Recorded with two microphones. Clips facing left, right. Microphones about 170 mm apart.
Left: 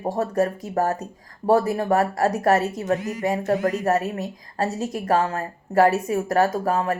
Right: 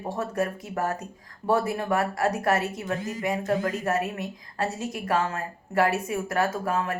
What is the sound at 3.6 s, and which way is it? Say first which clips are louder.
A woman's voice: left 5 dB; 35° left (ahead or behind).